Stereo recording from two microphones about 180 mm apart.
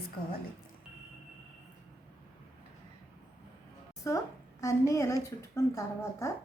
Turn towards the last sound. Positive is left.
turn(degrees=15)  # may be behind; listen again after turning